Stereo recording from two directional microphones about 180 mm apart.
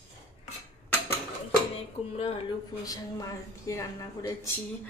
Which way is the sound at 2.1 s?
35° left (ahead or behind).